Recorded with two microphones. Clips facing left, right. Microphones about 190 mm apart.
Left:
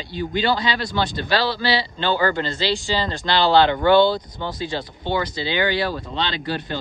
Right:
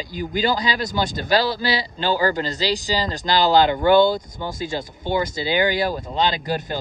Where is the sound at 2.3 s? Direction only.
40° right (ahead or behind).